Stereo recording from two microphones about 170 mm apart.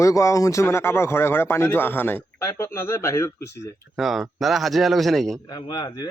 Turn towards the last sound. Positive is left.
turn(degrees=25)  # may be behind; listen again after turning